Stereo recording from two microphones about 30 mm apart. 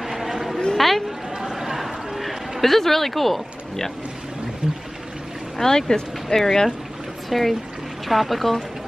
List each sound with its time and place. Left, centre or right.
0.0 s a sound: centre
0.7 s speech: centre
1.4 s chatter: centre
1.9 s a sound: centre
2.6 s speech: centre
5.6 s speech: centre
7.2 s speech: centre